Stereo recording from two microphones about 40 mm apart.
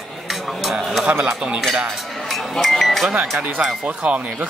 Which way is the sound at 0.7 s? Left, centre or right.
Centre.